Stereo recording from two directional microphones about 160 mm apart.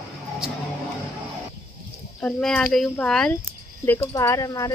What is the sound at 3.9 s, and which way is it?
Speech, 20° left (ahead or behind).